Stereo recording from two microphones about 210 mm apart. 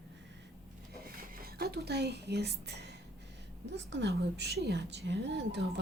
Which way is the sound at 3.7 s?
55° right (ahead or behind).